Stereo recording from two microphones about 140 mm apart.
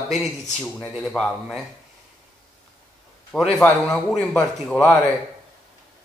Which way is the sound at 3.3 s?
5° left (ahead or behind).